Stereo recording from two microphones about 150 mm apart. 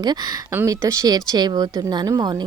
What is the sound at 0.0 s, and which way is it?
Speech, 25° right (ahead or behind).